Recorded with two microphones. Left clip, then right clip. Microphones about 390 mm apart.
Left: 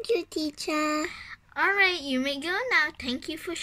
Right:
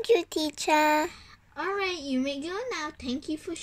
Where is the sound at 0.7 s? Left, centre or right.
Right.